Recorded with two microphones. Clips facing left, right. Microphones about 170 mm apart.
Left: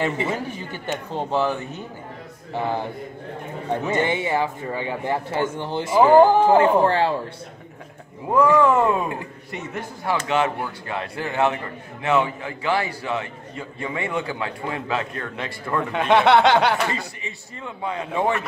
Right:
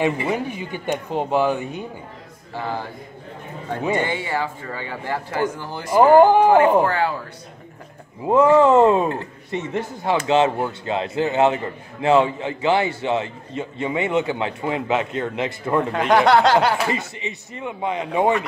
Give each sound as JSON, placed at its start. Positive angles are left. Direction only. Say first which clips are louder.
{"t": 0.3, "sound": "speech", "louder": "right 3 dB", "side_deg": -15}
{"t": 2.5, "sound": "speech", "louder": "left 3 dB", "side_deg": 20}
{"t": 4.0, "sound": "speech", "louder": "left 2 dB", "side_deg": 20}
{"t": 6.1, "sound": "speech", "louder": "right 1 dB", "side_deg": -15}
{"t": 6.8, "sound": "speech", "louder": "left 1 dB", "side_deg": 30}
{"t": 8.3, "sound": "speech", "louder": "right 3 dB", "side_deg": -25}
{"t": 15.9, "sound": "a sound", "louder": "even", "side_deg": 0}
{"t": 16.9, "sound": "speech", "louder": "right 4 dB", "side_deg": -20}